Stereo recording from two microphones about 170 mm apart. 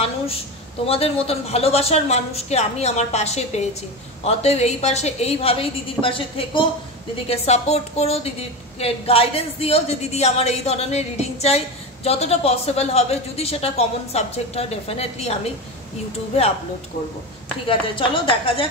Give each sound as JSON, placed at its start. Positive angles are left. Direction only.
{"t": 0.8, "sound": "a woman's voice", "side_deg": 35}
{"t": 17.6, "sound": "a woman's voice", "side_deg": 30}